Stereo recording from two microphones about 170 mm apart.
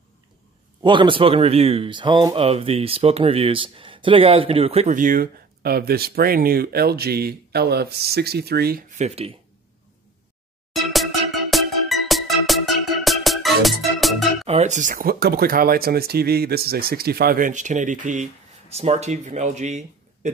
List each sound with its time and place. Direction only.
0.8 s speech: 30° right (ahead or behind)
4.9 s speech: 55° right (ahead or behind)
8.9 s speech: 40° right (ahead or behind)
10.7 s music: centre (ahead or behind)
14.4 s speech: 40° right (ahead or behind)